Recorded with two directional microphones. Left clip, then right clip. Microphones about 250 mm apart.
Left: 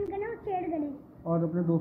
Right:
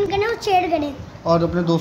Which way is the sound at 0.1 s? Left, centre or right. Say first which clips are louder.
Right 15 dB; centre.